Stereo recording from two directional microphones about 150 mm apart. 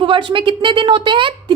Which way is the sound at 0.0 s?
35° right (ahead or behind).